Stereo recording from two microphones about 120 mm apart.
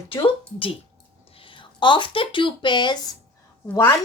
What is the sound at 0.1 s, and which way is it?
A woman's voice, 50° left (ahead or behind).